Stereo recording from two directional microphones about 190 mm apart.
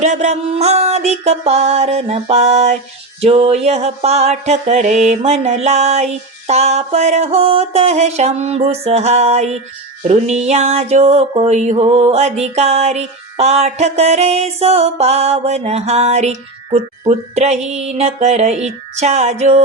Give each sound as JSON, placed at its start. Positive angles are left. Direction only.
{"t": 0.0, "sound": "music", "side_deg": -35}